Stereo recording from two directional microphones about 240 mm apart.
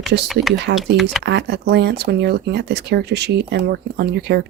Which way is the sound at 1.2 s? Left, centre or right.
Right.